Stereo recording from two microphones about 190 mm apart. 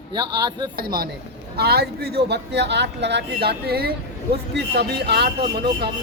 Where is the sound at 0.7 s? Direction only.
50° right (ahead or behind).